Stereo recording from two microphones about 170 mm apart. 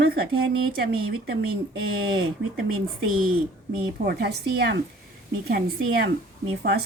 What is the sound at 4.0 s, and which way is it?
Speech, 70° right (ahead or behind).